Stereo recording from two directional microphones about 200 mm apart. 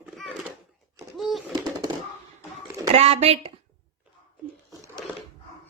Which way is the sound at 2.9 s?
30° right (ahead or behind).